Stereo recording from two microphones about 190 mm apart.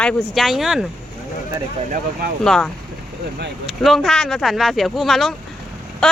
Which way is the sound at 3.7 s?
Centre (ahead or behind).